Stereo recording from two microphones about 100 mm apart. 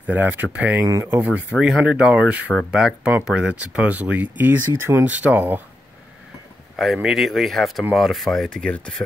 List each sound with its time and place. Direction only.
0.0 s speech: 20° right (ahead or behind)
6.8 s speech: 5° right (ahead or behind)